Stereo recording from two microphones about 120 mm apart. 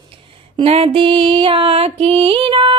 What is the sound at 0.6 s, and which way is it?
Music, 55° right (ahead or behind).